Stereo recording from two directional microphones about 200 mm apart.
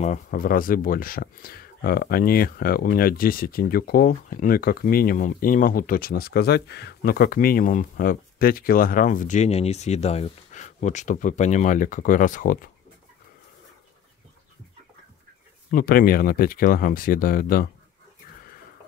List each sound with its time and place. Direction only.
0.0 s speech: 40° left (ahead or behind)
15.7 s speech: 45° left (ahead or behind)